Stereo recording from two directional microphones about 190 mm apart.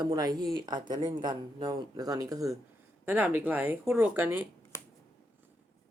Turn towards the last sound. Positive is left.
turn(degrees=15)  # may be behind; listen again after turning